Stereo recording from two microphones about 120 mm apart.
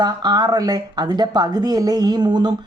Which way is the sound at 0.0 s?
35° right (ahead or behind).